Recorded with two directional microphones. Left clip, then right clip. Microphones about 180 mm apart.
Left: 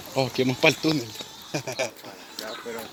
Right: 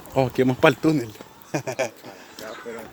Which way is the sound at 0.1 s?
30° right (ahead or behind).